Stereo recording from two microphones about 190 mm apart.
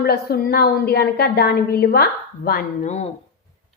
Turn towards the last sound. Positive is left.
turn(degrees=35)  # may be behind; listen again after turning